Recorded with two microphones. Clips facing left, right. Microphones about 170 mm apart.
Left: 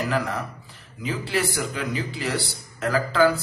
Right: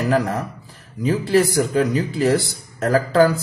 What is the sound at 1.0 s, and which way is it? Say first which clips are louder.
A man's voice: right 9 dB; 40° right (ahead or behind).